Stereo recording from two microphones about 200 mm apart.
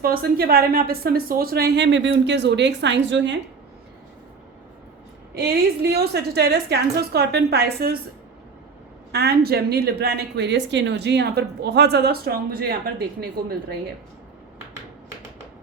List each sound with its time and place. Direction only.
0.0 s speech: 50° right (ahead or behind); by 3.3 s 65° right (ahead or behind)
5.3 s speech: 50° right (ahead or behind)
9.1 s speech: 55° right (ahead or behind)